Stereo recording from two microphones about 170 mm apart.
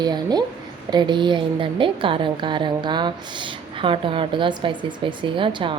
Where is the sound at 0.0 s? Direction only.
25° right (ahead or behind).